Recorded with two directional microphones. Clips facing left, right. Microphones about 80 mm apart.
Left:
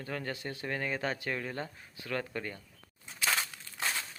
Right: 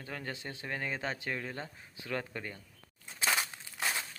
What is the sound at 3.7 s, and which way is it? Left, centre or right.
Crushing, centre.